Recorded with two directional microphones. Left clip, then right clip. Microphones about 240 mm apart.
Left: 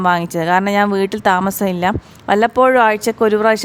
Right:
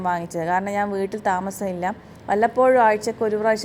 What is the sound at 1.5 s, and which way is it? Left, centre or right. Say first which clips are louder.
Speech: left 8 dB; left.